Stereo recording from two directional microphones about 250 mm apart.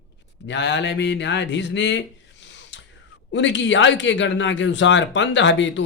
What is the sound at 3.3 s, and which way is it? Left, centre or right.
A man's voice, left.